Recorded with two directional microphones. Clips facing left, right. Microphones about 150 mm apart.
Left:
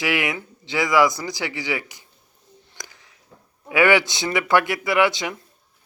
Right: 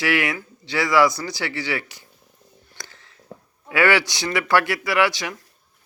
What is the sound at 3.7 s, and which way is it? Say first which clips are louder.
Speech: left 2 dB; 20° left (ahead or behind).